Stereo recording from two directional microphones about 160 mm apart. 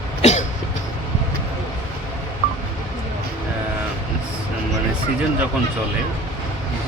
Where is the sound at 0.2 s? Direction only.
45° left (ahead or behind).